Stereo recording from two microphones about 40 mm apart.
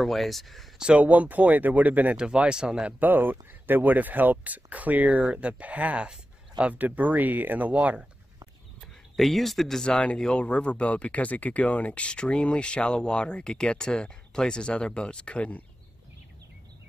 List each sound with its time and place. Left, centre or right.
0.0 s speech: centre
0.7 s speech: right
1.0 s speech: right
2.1 s speech: right
3.0 s speech: right
9.1 s speech: centre
9.8 s speech: left